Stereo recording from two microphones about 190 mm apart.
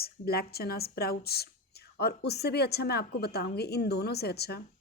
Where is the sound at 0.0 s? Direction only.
55° left (ahead or behind).